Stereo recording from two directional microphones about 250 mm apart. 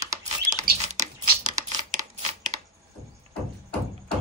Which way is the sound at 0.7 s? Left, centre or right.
Right.